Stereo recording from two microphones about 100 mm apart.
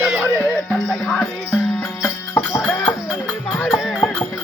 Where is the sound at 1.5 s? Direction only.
20° left (ahead or behind).